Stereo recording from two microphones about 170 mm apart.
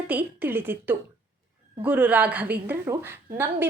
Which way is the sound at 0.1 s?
10° right (ahead or behind).